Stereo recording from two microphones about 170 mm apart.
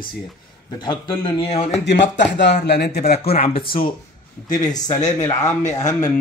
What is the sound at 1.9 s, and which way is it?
Speech, 90° left.